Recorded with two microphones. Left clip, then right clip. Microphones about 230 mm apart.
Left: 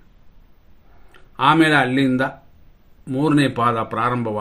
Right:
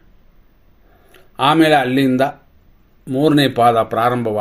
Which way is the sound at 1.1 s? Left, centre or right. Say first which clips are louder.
Right 1 dB; centre.